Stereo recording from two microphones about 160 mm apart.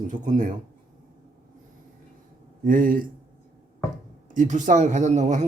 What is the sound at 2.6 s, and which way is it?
Speech, 60° right (ahead or behind).